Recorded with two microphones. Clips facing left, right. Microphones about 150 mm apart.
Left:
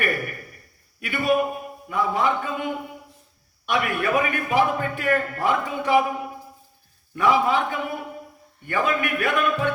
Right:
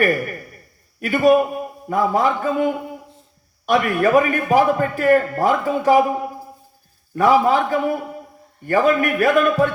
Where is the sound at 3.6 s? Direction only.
40° right (ahead or behind).